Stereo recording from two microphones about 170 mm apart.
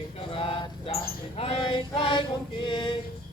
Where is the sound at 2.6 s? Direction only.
25° left (ahead or behind).